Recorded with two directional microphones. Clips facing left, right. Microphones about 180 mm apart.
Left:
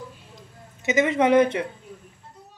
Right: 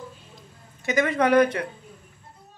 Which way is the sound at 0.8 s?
20° left (ahead or behind).